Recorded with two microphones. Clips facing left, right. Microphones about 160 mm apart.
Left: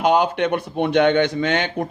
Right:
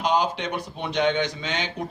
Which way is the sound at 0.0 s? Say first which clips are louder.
Left 6 dB; 60° left (ahead or behind).